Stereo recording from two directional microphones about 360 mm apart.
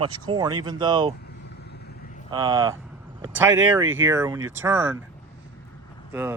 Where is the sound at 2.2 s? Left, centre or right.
Centre.